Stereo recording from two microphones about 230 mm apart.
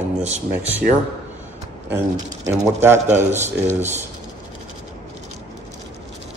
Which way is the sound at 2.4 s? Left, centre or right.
Centre.